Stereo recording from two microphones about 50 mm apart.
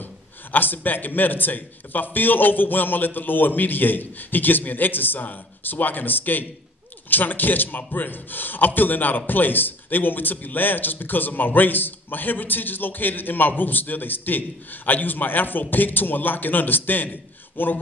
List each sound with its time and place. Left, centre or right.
0.0 s a man's voice: left